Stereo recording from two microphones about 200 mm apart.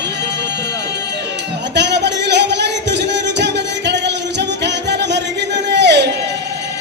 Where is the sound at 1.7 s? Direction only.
60° right (ahead or behind).